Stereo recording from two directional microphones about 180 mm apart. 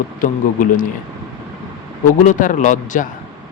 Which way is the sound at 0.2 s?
45° left (ahead or behind).